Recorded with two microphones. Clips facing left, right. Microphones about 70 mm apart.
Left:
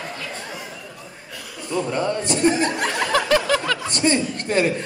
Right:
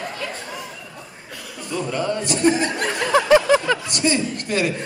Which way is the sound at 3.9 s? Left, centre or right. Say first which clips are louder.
Left 1 dB; left.